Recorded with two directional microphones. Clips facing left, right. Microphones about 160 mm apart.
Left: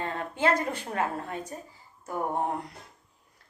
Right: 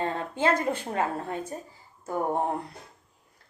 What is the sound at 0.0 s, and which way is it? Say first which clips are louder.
A woman's voice: right 1 dB; 30° right (ahead or behind).